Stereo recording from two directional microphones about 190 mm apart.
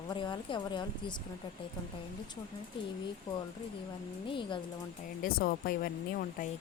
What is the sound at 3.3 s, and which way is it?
Speech, 25° left (ahead or behind).